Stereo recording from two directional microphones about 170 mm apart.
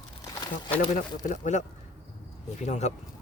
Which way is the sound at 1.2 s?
45° left (ahead or behind).